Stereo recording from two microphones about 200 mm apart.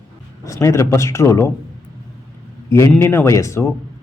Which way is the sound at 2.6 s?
15° left (ahead or behind).